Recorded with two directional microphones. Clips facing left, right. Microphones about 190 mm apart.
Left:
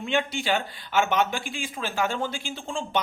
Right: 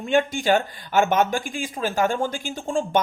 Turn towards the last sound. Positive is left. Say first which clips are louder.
# right 6 dB
turn(degrees=-45)  # may be behind; listen again after turning